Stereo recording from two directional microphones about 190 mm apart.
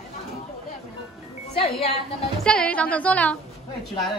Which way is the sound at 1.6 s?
30° left (ahead or behind).